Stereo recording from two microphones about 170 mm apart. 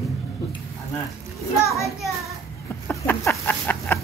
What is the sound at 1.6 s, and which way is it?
Speech, 15° left (ahead or behind).